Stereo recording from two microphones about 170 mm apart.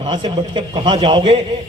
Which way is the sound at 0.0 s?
30° right (ahead or behind).